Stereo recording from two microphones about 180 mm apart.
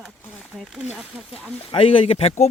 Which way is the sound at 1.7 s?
30° left (ahead or behind).